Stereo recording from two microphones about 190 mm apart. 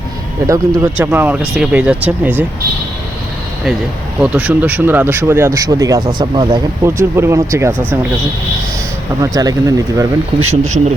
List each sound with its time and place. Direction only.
0.4 s speech: 15° right (ahead or behind)
4.2 s speech: 5° right (ahead or behind); by 6.6 s 25° right (ahead or behind)
6.8 s speech: 15° right (ahead or behind)
9.2 s speech: 20° right (ahead or behind)
10.4 s speech: 35° right (ahead or behind)